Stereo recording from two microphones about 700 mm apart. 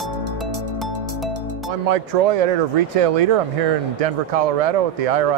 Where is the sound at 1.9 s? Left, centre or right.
Right.